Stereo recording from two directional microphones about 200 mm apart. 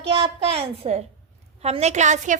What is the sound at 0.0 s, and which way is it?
A woman's voice, 30° right (ahead or behind).